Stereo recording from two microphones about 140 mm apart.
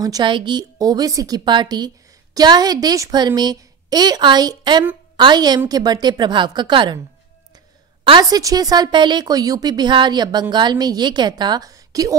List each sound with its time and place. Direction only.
0.0 s a woman's voice: 30° right (ahead or behind)
8.0 s a woman's voice: 30° right (ahead or behind)